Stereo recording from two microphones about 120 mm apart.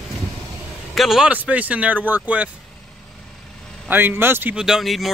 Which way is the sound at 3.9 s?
15° right (ahead or behind).